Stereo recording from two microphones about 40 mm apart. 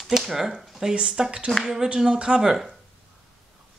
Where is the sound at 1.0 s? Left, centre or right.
Right.